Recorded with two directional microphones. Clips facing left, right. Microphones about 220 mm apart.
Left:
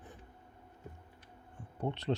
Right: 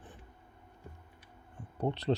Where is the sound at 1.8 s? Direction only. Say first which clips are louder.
Right 3 dB; 35° right (ahead or behind).